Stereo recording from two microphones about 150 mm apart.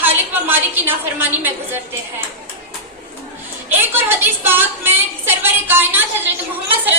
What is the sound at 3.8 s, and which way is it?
A woman's voice, 15° right (ahead or behind).